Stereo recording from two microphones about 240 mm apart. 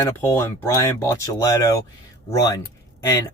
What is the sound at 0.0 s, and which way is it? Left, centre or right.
Speech, centre.